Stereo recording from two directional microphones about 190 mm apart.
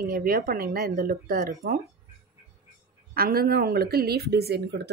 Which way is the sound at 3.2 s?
55° right (ahead or behind).